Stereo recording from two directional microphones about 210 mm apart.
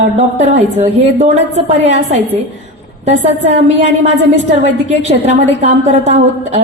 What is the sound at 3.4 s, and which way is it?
A woman's voice, 35° right (ahead or behind).